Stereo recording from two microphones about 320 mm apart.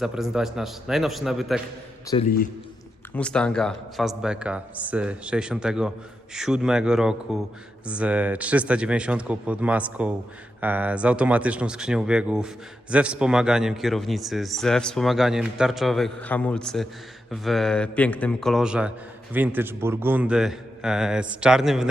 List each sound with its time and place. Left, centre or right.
0.0 s a man's voice: centre
2.2 s a man's voice: left
3.2 s a man's voice: centre